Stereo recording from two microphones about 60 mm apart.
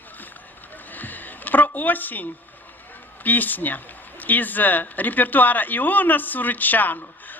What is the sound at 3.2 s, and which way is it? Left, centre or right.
A woman's voice, left.